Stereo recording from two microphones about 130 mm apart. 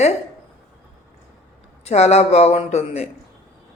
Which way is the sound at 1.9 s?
55° left (ahead or behind).